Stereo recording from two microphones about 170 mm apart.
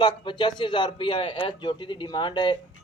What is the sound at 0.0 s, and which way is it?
A man's voice, 30° left (ahead or behind).